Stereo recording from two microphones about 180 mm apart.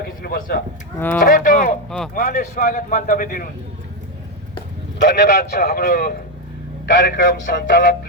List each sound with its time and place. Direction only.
0.2 s speech: 50° left (ahead or behind)
0.9 s speech: 10° left (ahead or behind)
1.2 s speech: 45° left (ahead or behind)
5.0 s a man's voice: 70° left (ahead or behind); by 6.1 s 45° left (ahead or behind)
6.8 s a man's voice: 55° left (ahead or behind)